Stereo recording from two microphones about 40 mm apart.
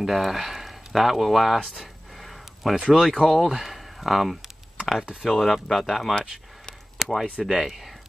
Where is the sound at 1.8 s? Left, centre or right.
Centre.